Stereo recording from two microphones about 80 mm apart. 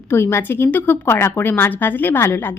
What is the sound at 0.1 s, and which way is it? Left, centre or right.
A woman's voice, left.